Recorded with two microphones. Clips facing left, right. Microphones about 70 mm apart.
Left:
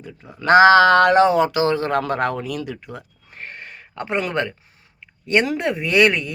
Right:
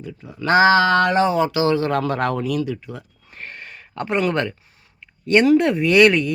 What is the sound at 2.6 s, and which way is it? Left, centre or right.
Speech, left.